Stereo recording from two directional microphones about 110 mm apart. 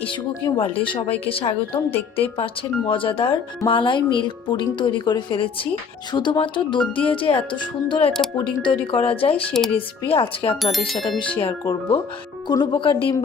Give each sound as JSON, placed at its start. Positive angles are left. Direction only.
{"t": 0.0, "sound": "speech", "side_deg": 50}
{"t": 1.9, "sound": "speech", "side_deg": 15}
{"t": 2.2, "sound": "speech", "side_deg": 55}
{"t": 9.5, "sound": "speech", "side_deg": 5}
{"t": 9.7, "sound": "speech", "side_deg": 55}
{"t": 10.6, "sound": "speech", "side_deg": 0}
{"t": 12.5, "sound": "speech", "side_deg": 40}